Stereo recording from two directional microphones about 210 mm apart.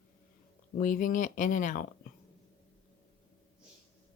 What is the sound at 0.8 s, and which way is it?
Speech, 40° left (ahead or behind).